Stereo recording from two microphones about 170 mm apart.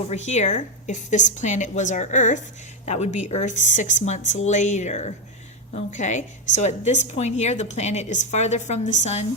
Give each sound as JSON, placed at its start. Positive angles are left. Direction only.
{"t": 0.1, "sound": "a woman's voice", "side_deg": 45}